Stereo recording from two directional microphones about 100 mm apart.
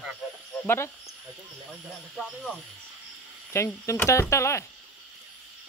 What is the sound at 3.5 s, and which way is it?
Speech, 25° left (ahead or behind).